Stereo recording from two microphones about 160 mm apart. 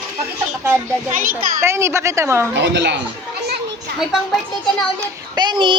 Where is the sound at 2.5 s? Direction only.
90° right.